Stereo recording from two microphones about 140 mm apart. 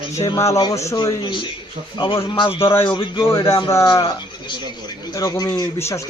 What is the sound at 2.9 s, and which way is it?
Speech, 35° left (ahead or behind).